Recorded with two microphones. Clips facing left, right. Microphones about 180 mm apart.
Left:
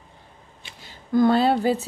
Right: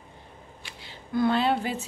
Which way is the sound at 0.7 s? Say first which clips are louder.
Left 7 dB; 45° left (ahead or behind).